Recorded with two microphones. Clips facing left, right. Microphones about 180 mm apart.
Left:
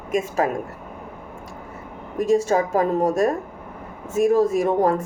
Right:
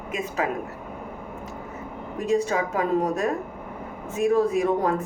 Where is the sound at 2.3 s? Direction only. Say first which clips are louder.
Left 4 dB; 40° left (ahead or behind).